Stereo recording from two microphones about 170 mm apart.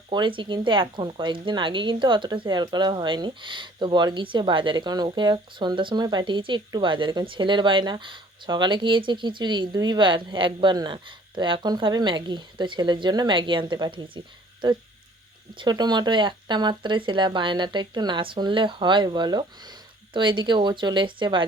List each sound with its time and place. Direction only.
0.1 s speech: 30° right (ahead or behind)